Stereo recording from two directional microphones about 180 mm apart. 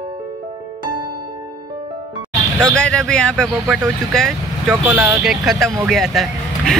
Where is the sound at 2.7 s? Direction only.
5° left (ahead or behind).